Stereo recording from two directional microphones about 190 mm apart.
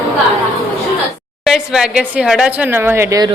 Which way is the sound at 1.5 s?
5° right (ahead or behind).